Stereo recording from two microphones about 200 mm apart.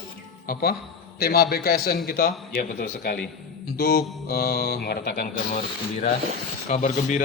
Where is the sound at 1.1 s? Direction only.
50° left (ahead or behind).